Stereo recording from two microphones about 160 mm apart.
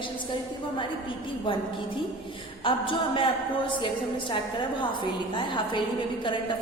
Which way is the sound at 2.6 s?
30° left (ahead or behind).